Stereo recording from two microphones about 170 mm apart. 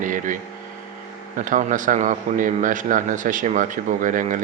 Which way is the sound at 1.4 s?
50° right (ahead or behind).